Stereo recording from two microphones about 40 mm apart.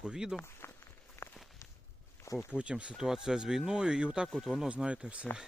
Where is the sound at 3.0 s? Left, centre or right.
Centre.